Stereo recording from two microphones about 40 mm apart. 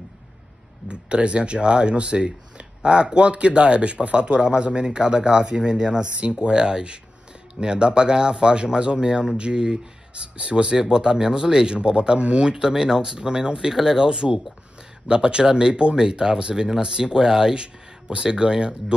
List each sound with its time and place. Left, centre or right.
0.8 s speech: right